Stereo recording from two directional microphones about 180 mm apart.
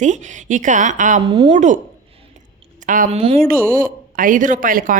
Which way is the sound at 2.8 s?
45° right (ahead or behind).